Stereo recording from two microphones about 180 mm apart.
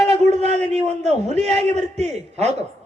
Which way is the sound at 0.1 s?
40° right (ahead or behind).